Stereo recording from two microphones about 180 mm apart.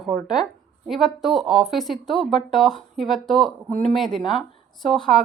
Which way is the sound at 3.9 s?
Centre (ahead or behind).